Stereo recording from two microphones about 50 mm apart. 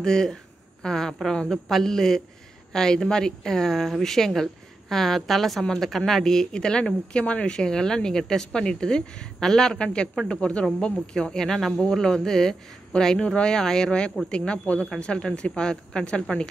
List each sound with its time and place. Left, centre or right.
0.0 s speech: centre